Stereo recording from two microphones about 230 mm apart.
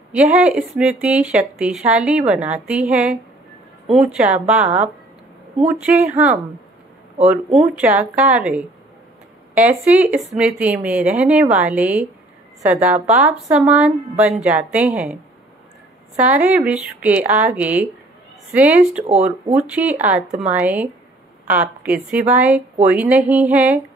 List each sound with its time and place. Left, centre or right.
0.1 s speech: centre
4.6 s speech: right
5.7 s speech: centre
9.7 s speech: centre
16.2 s speech: centre
19.0 s speech: right
19.7 s speech: centre